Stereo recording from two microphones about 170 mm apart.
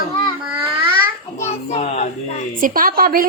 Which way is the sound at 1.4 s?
40° left (ahead or behind).